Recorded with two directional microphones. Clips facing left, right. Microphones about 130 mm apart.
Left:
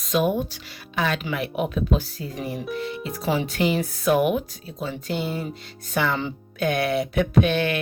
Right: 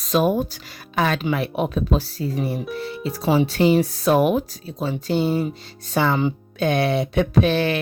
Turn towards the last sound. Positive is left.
turn(degrees=-35)  # may be behind; listen again after turning